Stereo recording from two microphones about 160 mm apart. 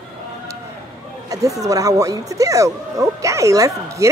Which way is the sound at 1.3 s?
20° right (ahead or behind).